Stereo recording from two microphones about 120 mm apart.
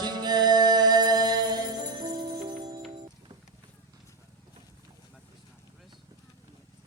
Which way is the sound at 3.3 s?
25° right (ahead or behind).